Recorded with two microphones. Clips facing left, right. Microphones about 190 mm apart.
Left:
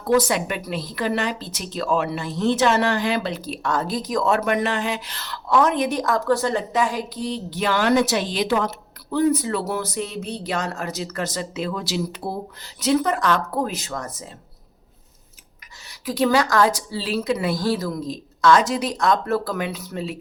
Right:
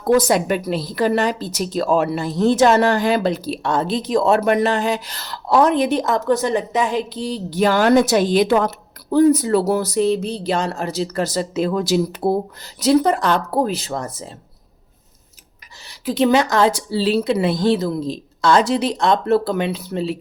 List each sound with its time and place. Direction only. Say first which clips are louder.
0.1 s a woman's voice: right 4 dB; 45° right (ahead or behind)
15.8 s a woman's voice: right 4 dB; 30° right (ahead or behind)